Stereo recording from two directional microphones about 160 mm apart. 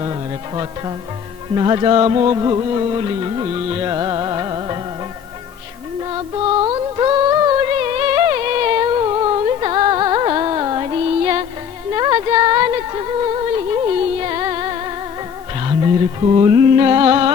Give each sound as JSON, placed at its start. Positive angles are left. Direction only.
{"t": 0.0, "sound": "music", "side_deg": -25}
{"t": 6.0, "sound": "music", "side_deg": -25}